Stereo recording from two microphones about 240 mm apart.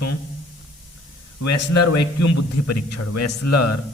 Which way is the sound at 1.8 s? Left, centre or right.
Left.